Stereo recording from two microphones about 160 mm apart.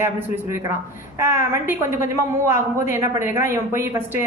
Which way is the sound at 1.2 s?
15° right (ahead or behind).